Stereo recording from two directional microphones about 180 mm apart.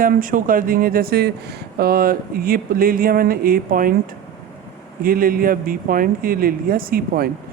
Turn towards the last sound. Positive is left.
turn(degrees=-55)  # may be behind; listen again after turning